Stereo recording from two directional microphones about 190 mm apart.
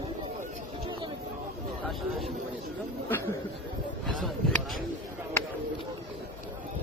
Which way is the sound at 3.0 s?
10° left (ahead or behind).